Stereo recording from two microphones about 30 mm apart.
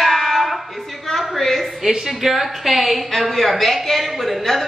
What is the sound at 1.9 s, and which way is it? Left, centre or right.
Speech, centre.